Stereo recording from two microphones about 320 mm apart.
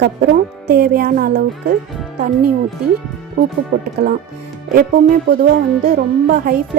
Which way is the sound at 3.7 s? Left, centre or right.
Right.